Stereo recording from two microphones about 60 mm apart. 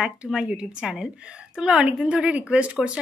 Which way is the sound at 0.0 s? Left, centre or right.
Centre.